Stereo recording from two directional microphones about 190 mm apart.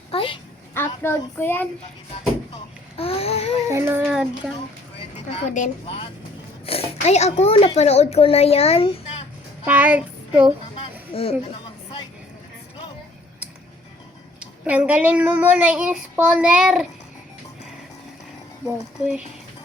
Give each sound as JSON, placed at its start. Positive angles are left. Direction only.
{"t": 0.1, "sound": "a sound", "side_deg": 25}
{"t": 0.7, "sound": "a child's voice", "side_deg": 10}
{"t": 3.0, "sound": "a sound", "side_deg": 30}
{"t": 3.7, "sound": "speech", "side_deg": -15}
{"t": 4.9, "sound": "a child's voice", "side_deg": 35}
{"t": 9.6, "sound": "child singing", "side_deg": -10}
{"t": 11.1, "sound": "speech", "side_deg": 30}
{"t": 14.3, "sound": "speech", "side_deg": -5}